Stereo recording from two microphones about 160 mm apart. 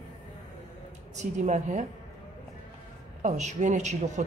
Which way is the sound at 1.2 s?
50° right (ahead or behind).